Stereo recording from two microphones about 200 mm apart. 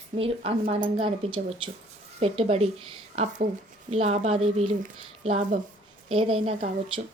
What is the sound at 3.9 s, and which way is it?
Speech, 30° right (ahead or behind).